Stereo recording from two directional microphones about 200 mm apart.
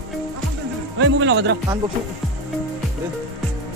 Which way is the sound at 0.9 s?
70° right (ahead or behind).